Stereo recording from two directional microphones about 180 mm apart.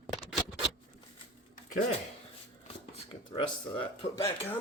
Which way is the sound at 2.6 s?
30° left (ahead or behind).